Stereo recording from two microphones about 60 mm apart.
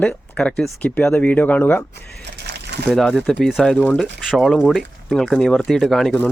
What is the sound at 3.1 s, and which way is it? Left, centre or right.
Speech, centre.